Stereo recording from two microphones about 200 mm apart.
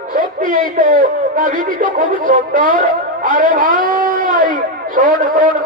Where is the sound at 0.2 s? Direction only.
45° right (ahead or behind).